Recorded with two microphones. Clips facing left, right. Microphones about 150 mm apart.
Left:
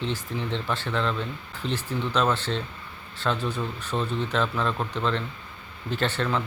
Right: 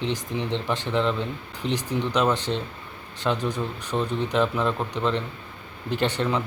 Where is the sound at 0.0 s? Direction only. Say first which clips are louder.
Right 2 dB; 20° right (ahead or behind).